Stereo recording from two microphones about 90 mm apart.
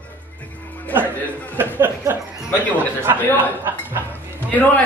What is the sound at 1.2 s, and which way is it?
Speech, 20° left (ahead or behind).